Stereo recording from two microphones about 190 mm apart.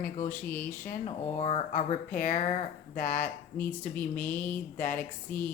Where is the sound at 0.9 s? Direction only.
35° left (ahead or behind).